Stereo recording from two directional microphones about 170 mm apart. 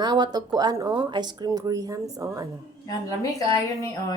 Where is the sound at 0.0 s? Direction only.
25° right (ahead or behind).